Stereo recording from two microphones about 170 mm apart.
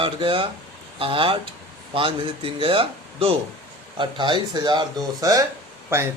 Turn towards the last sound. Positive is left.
turn(degrees=-15)  # may be behind; listen again after turning